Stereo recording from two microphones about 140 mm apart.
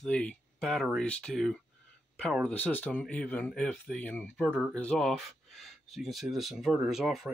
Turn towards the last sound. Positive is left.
turn(degrees=0)  # may be behind; listen again after turning